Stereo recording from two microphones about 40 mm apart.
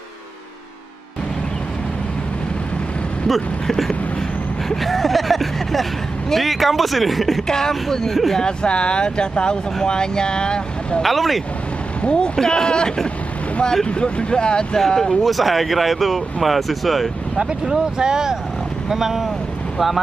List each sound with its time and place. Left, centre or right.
3.3 s speech: centre
4.6 s a sound: centre
6.3 s speech: centre
7.4 s speech: centre
8.4 s speech: left
11.0 s speech: centre
12.0 s speech: left
14.8 s speech: centre
17.4 s speech: centre